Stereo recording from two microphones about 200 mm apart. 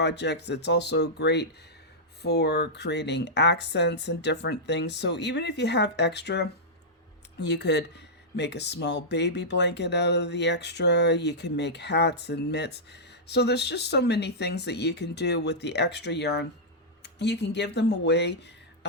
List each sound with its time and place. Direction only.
0.0 s speech: 60° left (ahead or behind)